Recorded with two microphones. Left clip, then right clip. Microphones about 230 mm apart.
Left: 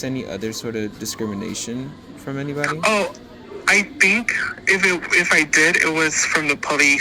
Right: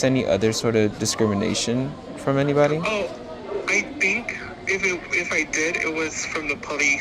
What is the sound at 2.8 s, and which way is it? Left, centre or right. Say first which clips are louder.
A man's voice: left 6 dB; left.